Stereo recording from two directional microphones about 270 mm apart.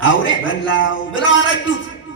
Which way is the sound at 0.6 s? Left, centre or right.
Left.